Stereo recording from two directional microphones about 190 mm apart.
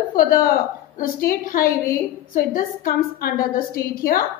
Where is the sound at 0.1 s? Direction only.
50° left (ahead or behind).